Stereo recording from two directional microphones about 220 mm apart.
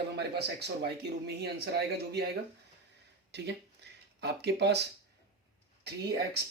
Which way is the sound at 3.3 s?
50° right (ahead or behind).